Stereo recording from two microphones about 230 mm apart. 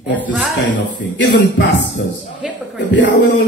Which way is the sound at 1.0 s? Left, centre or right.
Left.